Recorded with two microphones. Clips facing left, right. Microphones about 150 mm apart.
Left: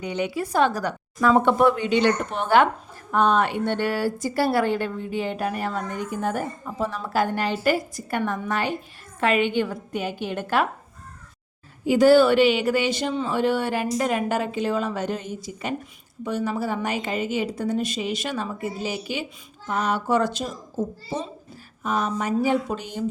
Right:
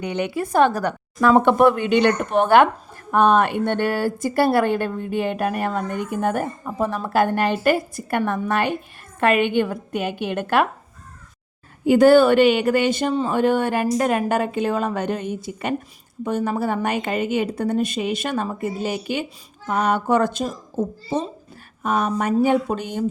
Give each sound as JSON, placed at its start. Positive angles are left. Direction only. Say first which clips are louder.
{"t": 0.0, "sound": "speech", "louder": "right 2 dB", "side_deg": -60}
{"t": 11.9, "sound": "a woman's voice", "louder": "right 3 dB", "side_deg": -55}
{"t": 21.8, "sound": "speech", "louder": "right 4 dB", "side_deg": -55}